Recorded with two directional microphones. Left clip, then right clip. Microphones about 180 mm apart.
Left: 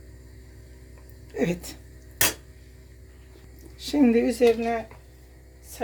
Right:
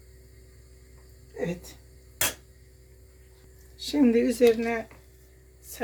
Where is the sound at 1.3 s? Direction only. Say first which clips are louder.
Left 5 dB; 50° left (ahead or behind).